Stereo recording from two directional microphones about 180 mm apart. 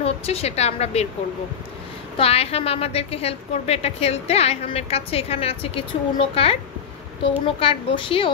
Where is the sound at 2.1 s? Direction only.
35° left (ahead or behind).